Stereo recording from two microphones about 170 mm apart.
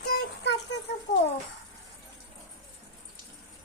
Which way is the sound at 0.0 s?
70° left (ahead or behind).